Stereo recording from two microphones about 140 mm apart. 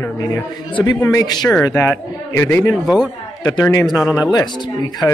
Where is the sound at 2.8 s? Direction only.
5° right (ahead or behind).